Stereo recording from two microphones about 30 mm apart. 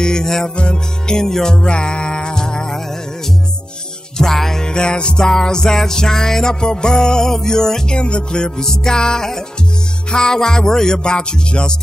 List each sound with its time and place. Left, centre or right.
0.0 s music: left
0.6 s music: left
1.1 s music: centre
1.6 s music: left
4.2 s music: centre
4.6 s music: left
5.3 s music: centre
7.9 s music: left